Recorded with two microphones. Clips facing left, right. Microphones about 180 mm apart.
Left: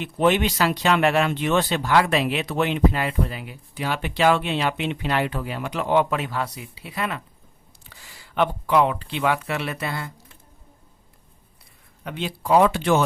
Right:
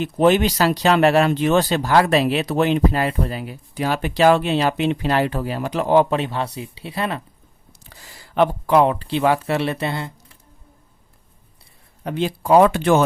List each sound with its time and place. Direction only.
0.0 s speech: 40° right (ahead or behind)
12.0 s speech: 40° right (ahead or behind)